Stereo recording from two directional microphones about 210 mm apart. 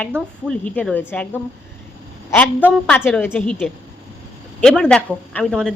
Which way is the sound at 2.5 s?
10° right (ahead or behind).